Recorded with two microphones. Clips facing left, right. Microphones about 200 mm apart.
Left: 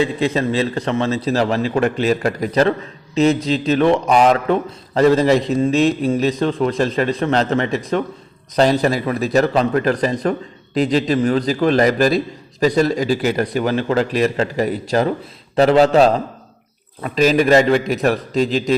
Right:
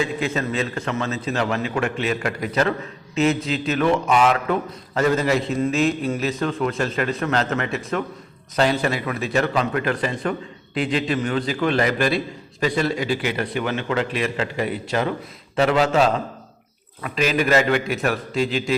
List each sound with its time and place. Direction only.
0.0 s a man's voice: 30° left (ahead or behind)